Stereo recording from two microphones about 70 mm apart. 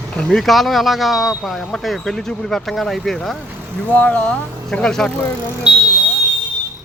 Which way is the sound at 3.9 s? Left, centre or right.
Centre.